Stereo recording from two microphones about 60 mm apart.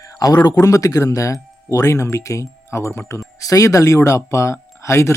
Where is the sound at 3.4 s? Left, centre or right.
Left.